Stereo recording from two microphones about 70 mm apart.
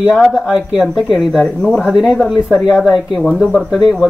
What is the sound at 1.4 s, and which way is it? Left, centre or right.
Speech, centre.